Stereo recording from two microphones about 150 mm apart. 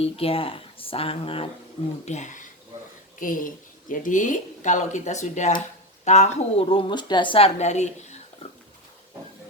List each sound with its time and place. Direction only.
0.0 s speech: 40° left (ahead or behind)
2.0 s a woman's voice: 55° left (ahead or behind)